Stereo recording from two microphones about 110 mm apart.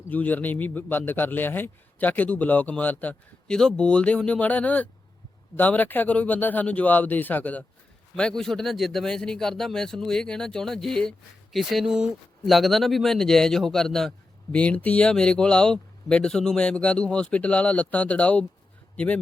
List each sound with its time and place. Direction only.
0.1 s a man's voice: 15° left (ahead or behind)